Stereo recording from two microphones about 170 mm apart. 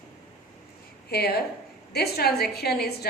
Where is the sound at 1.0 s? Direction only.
70° left (ahead or behind).